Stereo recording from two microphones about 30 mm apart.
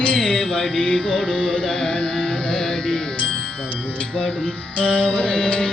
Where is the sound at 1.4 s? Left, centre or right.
Centre.